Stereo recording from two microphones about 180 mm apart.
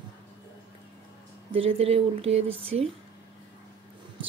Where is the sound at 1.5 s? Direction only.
35° right (ahead or behind).